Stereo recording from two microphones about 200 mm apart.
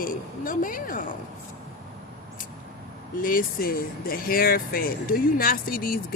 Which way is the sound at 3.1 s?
45° left (ahead or behind).